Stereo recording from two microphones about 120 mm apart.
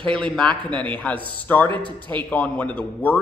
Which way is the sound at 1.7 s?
40° right (ahead or behind).